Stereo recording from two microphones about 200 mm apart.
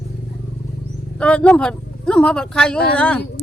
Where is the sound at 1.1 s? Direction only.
5° left (ahead or behind).